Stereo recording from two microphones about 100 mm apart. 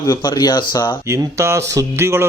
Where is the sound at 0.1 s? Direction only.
45° left (ahead or behind).